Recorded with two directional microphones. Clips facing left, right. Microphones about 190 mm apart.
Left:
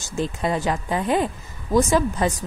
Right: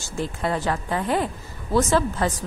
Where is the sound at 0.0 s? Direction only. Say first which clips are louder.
Left 2 dB; 20° left (ahead or behind).